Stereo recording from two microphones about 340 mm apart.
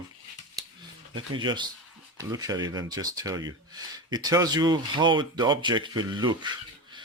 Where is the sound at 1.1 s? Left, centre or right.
Centre.